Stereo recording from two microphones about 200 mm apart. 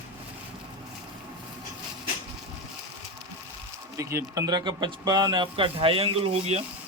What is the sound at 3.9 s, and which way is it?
Speech, 15° right (ahead or behind).